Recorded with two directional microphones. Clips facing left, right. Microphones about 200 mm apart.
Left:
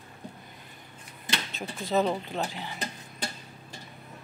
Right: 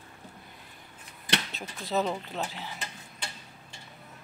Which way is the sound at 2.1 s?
Centre (ahead or behind).